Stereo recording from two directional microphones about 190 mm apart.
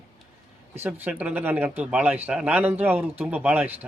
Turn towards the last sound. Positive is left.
turn(degrees=-10)  # may be behind; listen again after turning